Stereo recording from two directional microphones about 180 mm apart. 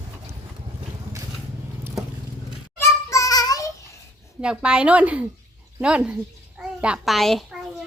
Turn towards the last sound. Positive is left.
turn(degrees=0)  # may be behind; listen again after turning